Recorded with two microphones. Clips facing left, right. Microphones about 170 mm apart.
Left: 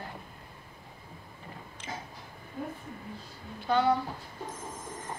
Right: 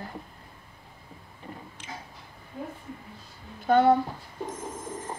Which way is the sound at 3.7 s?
50° right (ahead or behind).